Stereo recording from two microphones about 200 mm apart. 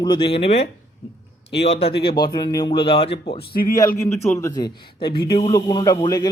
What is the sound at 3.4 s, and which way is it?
Speech, 45° left (ahead or behind).